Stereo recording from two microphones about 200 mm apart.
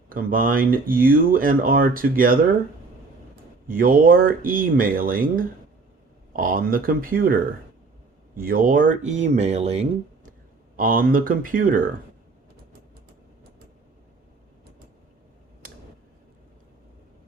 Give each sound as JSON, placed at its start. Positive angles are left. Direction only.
{"t": 0.1, "sound": "speech", "side_deg": -45}
{"t": 3.7, "sound": "speech", "side_deg": -45}
{"t": 8.4, "sound": "speech", "side_deg": -45}
{"t": 10.8, "sound": "speech", "side_deg": -45}